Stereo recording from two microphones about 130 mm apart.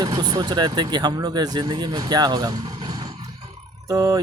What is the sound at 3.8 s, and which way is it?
Music, 30° right (ahead or behind).